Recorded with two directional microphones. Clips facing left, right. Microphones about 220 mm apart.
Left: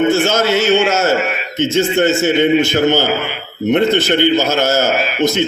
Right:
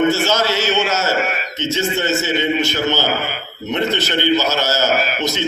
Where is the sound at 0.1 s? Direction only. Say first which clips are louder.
Left 4 dB; 50° left (ahead or behind).